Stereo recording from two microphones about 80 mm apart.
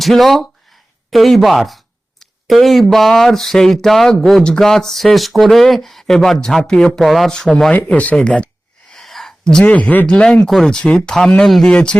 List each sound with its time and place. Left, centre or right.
0.0 s speech: centre
1.1 s a sound: centre
2.9 s speech: centre
7.7 s speech: centre
8.9 s a sound: centre
9.6 s speech: centre